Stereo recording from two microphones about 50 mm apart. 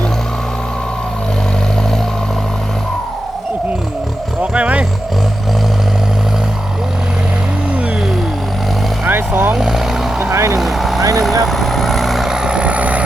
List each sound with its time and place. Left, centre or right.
4.5 s wild animals: right
9.0 s vehicle: right
9.6 s vehicle: centre
10.2 s vehicle: right
10.6 s vehicle: centre; by 13.0 s right